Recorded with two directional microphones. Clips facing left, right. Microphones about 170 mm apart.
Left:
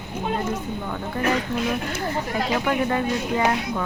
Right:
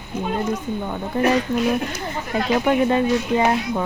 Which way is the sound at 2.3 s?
20° right (ahead or behind).